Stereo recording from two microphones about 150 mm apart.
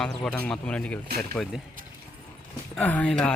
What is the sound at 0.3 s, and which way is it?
Speech, 10° left (ahead or behind).